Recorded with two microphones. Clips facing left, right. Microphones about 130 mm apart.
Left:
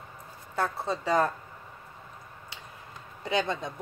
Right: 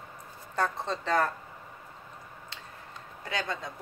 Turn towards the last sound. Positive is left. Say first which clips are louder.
# left 5 dB
turn(degrees=20)  # may be behind; listen again after turning